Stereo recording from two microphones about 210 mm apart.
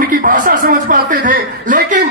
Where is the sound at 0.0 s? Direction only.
40° right (ahead or behind).